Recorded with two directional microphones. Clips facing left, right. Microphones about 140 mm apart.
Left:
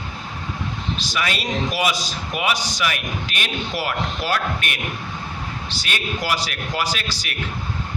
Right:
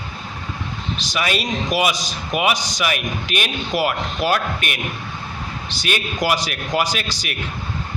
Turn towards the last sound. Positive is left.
turn(degrees=-15)  # may be behind; listen again after turning